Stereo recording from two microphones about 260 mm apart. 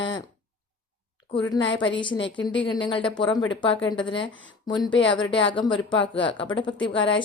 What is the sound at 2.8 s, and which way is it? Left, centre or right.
A woman's voice, centre.